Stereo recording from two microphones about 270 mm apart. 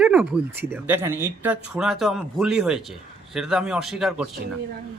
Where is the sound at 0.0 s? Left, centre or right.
Centre.